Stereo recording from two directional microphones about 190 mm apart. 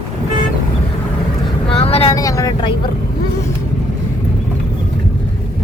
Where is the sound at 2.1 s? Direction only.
15° left (ahead or behind).